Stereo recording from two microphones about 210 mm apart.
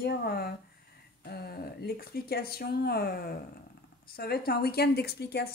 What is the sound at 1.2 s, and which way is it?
Speech, 50° left (ahead or behind).